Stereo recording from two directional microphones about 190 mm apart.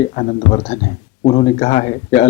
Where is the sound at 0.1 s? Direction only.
35° left (ahead or behind).